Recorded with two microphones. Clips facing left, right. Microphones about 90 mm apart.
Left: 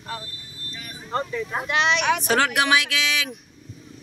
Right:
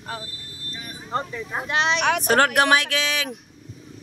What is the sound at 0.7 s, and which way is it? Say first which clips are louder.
Speech: even; 20° right (ahead or behind).